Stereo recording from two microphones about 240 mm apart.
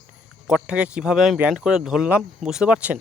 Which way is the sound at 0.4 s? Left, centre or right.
Centre.